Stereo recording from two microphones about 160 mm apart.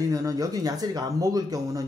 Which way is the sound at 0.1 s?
20° right (ahead or behind).